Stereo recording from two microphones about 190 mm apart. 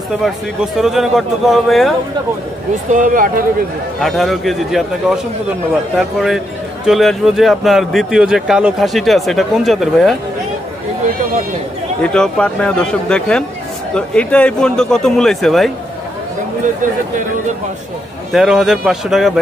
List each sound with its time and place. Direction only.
0.7 s a man's voice: centre (ahead or behind)
2.9 s speech: 45° right (ahead or behind)
4.0 s a man's voice: centre (ahead or behind)
12.0 s a man's voice: 5° left (ahead or behind)
18.3 s a man's voice: centre (ahead or behind)